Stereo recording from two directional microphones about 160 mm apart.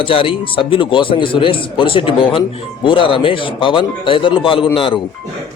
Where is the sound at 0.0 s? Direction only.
35° left (ahead or behind).